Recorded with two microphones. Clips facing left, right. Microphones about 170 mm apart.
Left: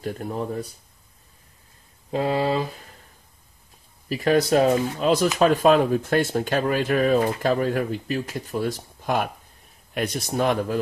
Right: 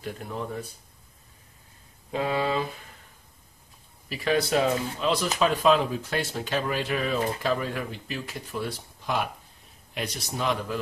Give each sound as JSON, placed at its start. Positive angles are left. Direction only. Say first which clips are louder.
{"t": 0.0, "sound": "speech", "louder": "left 5 dB", "side_deg": 40}
{"t": 2.0, "sound": "speech", "louder": "left 4 dB", "side_deg": 35}
{"t": 4.1, "sound": "speech", "louder": "left 5 dB", "side_deg": 45}